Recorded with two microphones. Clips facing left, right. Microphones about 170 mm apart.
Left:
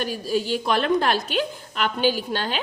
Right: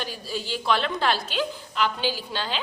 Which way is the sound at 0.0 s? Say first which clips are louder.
Left 8 dB; 50° left (ahead or behind).